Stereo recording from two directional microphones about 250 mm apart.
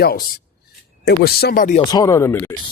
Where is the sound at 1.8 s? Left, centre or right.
Centre.